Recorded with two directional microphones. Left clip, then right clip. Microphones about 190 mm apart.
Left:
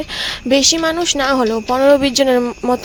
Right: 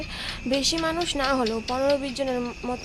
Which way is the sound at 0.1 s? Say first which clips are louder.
Left 12 dB; 40° left (ahead or behind).